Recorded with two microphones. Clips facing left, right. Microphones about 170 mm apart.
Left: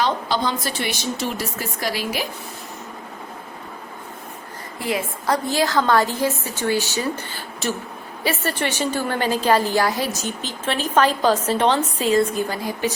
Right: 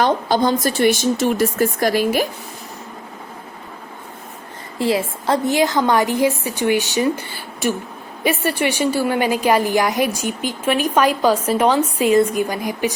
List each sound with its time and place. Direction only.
0.0 s speech: 45° right (ahead or behind)
4.8 s a woman's voice: 30° right (ahead or behind)